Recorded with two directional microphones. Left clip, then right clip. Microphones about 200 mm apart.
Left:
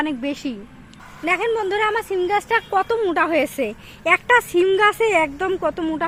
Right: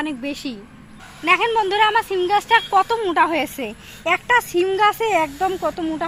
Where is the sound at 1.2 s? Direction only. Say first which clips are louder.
Right 3 dB; 40° left (ahead or behind).